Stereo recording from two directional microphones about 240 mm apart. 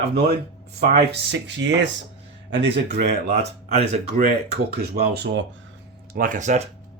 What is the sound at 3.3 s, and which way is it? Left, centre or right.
Speech, right.